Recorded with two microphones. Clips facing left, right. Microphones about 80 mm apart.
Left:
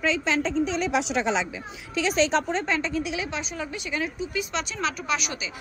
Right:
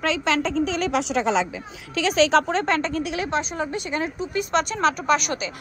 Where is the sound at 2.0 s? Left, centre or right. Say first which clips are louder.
Right 4 dB; right.